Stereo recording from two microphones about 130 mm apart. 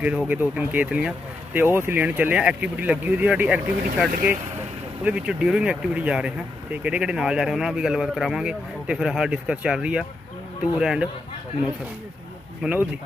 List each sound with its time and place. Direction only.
0.0 s speech: 10° right (ahead or behind)